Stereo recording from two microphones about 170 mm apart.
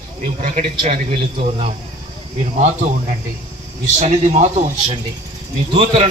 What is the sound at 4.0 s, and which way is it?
Speech, 40° right (ahead or behind).